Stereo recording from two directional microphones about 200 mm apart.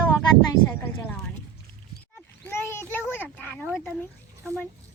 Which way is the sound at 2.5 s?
10° left (ahead or behind).